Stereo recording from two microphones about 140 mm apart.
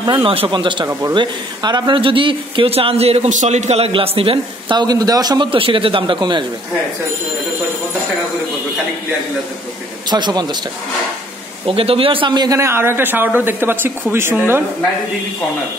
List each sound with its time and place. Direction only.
0.0 s a man's voice: 35° right (ahead or behind)
10.0 s a man's voice: 30° right (ahead or behind)
11.6 s a man's voice: 40° right (ahead or behind); by 14.6 s 15° right (ahead or behind)